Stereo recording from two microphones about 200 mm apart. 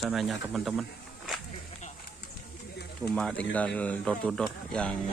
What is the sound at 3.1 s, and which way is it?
Speech, 5° left (ahead or behind).